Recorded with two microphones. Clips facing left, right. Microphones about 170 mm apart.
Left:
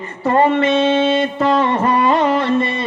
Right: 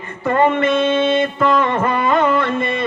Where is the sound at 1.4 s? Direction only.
35° left (ahead or behind).